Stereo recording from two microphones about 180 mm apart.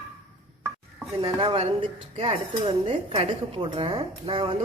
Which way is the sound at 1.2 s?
30° right (ahead or behind).